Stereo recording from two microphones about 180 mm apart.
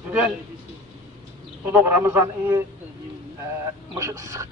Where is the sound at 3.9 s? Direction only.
15° right (ahead or behind).